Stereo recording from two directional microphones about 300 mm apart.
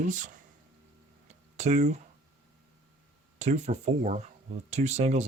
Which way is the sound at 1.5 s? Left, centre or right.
Right.